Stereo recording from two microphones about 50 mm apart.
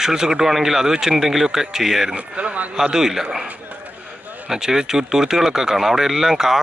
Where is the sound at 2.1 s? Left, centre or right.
Right.